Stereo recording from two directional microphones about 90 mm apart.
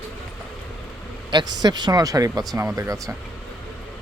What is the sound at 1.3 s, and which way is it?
Speech, 50° right (ahead or behind).